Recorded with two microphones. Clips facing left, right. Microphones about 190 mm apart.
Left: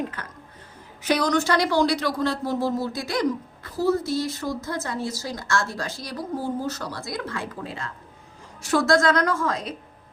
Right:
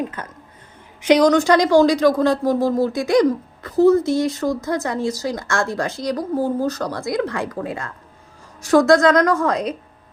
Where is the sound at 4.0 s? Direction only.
20° right (ahead or behind).